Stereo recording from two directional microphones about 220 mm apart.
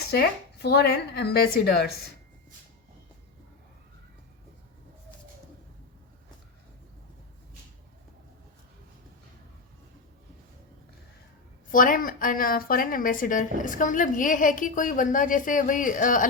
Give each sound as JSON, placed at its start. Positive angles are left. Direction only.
{"t": 0.1, "sound": "a woman's voice", "side_deg": 45}
{"t": 11.7, "sound": "a woman's voice", "side_deg": 40}